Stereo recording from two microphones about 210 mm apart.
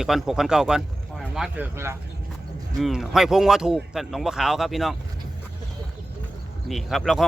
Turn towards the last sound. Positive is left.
turn(degrees=0)  # may be behind; listen again after turning